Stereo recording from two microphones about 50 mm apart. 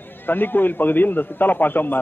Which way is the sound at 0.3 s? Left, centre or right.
Left.